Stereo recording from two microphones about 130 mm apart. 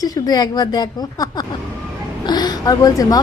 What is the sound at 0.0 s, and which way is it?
A woman's voice, 30° left (ahead or behind).